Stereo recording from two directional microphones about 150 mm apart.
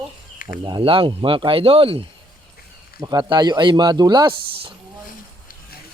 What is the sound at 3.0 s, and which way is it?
Speech, 30° right (ahead or behind).